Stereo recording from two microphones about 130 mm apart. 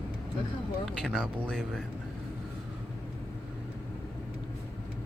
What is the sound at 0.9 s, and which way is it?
Speech, 5° left (ahead or behind).